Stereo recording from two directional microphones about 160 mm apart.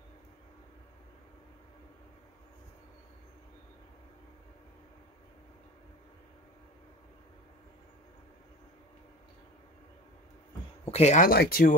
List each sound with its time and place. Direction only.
10.9 s speech: 45° left (ahead or behind)
11.2 s speech: 70° left (ahead or behind)